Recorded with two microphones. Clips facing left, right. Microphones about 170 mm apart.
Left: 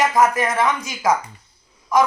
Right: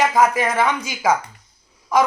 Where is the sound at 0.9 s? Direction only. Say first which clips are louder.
Even; 5° right (ahead or behind).